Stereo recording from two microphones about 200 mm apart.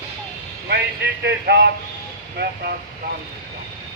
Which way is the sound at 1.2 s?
60° right (ahead or behind).